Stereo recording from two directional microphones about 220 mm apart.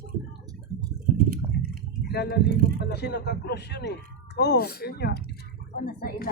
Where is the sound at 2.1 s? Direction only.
50° left (ahead or behind).